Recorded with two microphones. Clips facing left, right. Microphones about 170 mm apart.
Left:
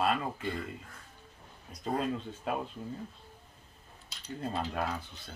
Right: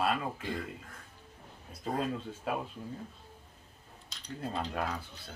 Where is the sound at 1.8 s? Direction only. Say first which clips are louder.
Left 1 dB; 5° right (ahead or behind).